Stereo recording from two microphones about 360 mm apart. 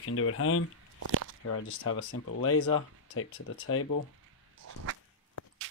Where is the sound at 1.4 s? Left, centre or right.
Left.